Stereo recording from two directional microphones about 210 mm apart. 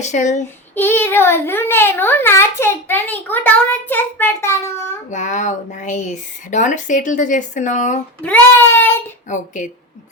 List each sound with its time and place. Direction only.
0.0 s speech: 35° left (ahead or behind)
0.8 s a child's voice: 10° left (ahead or behind)
5.1 s speech: 35° left (ahead or behind)
8.2 s a child's voice: 10° left (ahead or behind)
9.3 s speech: 35° left (ahead or behind)